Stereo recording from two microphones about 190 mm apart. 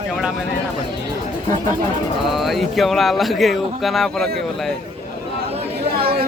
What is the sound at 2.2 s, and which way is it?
Speech, centre (ahead or behind).